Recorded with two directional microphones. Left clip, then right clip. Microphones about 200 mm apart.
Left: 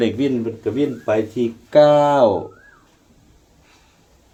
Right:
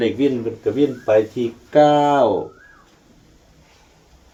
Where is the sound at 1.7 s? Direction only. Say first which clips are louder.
Left 1 dB; 55° left (ahead or behind).